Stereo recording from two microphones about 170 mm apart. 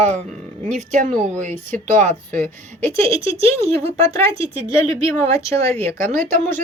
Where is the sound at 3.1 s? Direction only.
35° right (ahead or behind).